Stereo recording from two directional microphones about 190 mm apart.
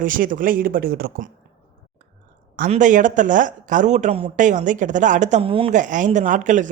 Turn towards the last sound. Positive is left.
turn(degrees=-40)  # may be behind; listen again after turning